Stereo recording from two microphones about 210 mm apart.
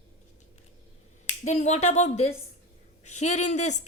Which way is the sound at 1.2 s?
35° left (ahead or behind).